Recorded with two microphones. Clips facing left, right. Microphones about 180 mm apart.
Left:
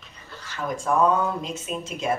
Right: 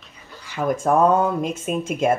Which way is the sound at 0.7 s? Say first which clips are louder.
Right 4 dB; 50° right (ahead or behind).